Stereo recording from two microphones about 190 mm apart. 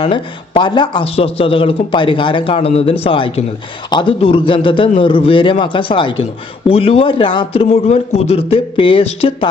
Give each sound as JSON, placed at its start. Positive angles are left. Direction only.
{"t": 0.0, "sound": "speech", "side_deg": 25}